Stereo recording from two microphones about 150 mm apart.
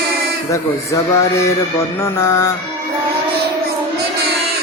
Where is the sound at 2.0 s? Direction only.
15° left (ahead or behind).